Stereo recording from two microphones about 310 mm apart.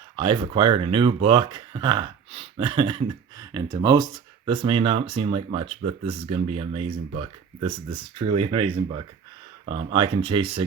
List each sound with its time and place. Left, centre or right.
0.2 s speech: centre